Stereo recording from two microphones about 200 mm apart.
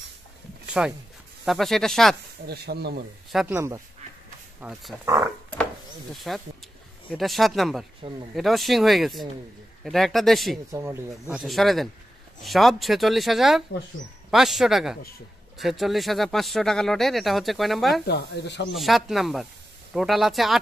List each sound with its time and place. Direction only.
0.8 s speech: 5° right (ahead or behind)
2.4 s speech: 55° right (ahead or behind)
3.3 s speech: centre (ahead or behind)
3.5 s speech: 15° right (ahead or behind)
5.0 s speech: 15° right (ahead or behind)
6.1 s speech: centre (ahead or behind)
8.0 s speech: 25° right (ahead or behind)
8.4 s speech: centre (ahead or behind)
10.7 s speech: 15° right (ahead or behind)
11.2 s speech: centre (ahead or behind)
18.0 s speech: 55° left (ahead or behind)
18.8 s speech: centre (ahead or behind)